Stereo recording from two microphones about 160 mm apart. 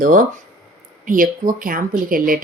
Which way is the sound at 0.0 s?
55° right (ahead or behind).